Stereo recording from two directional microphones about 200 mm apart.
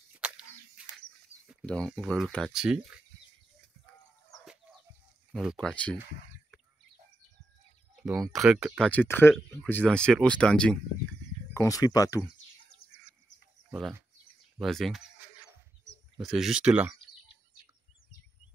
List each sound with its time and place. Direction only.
0.1 s a sound: 5° right (ahead or behind)
1.5 s speech: centre (ahead or behind)
5.3 s speech: centre (ahead or behind)
8.2 s speech: centre (ahead or behind)
11.5 s speech: 15° left (ahead or behind)
13.7 s speech: centre (ahead or behind)